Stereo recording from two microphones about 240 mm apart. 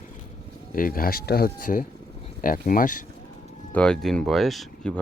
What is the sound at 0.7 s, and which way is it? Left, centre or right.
Speech, left.